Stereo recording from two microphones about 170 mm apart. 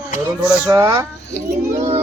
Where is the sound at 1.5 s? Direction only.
40° right (ahead or behind).